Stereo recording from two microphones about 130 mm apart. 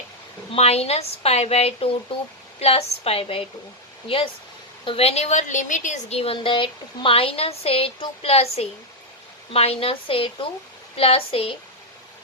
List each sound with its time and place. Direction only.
0.5 s speech: 55° left (ahead or behind)
4.9 s a woman's voice: 50° left (ahead or behind); by 6.1 s 70° left (ahead or behind)
6.1 s speech: 45° left (ahead or behind)